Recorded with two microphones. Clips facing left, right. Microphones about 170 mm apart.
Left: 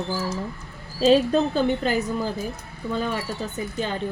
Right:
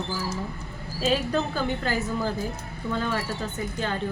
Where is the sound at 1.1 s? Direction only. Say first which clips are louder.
Left 7 dB; 25° left (ahead or behind).